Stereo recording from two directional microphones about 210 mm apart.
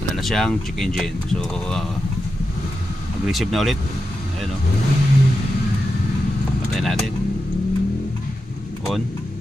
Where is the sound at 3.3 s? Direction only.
Centre (ahead or behind).